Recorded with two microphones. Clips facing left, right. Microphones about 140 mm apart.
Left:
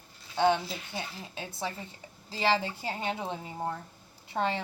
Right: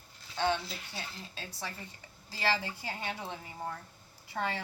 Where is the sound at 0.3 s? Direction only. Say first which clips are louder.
Left 6 dB; 20° left (ahead or behind).